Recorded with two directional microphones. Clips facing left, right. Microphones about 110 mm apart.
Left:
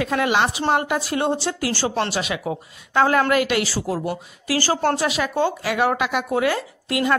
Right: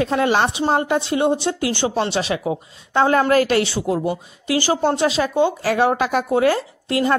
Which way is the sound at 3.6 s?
20° right (ahead or behind).